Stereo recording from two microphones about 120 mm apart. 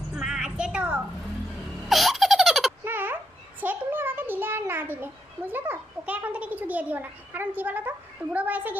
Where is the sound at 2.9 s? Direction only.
15° right (ahead or behind).